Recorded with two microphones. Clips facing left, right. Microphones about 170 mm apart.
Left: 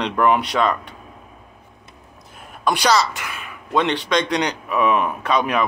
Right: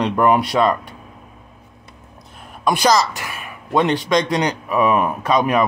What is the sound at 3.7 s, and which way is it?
Speech, 40° right (ahead or behind).